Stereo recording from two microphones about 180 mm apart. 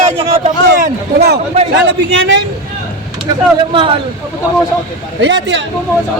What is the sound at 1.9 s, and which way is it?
Speech, 90° right.